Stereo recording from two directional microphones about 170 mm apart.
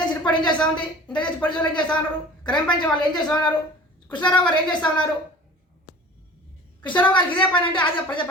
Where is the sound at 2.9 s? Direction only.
25° left (ahead or behind).